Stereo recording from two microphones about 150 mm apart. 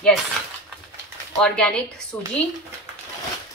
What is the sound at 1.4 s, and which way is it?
Speech, 5° left (ahead or behind).